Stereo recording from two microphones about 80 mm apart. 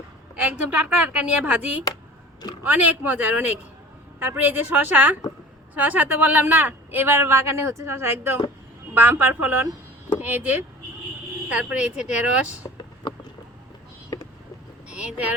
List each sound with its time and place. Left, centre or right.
1.0 s a woman's voice: centre
14.8 s speech: centre